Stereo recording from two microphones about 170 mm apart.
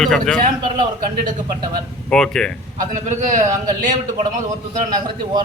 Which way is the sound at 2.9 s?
45° right (ahead or behind).